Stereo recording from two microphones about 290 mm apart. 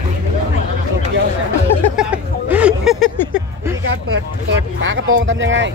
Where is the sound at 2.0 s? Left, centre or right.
Centre.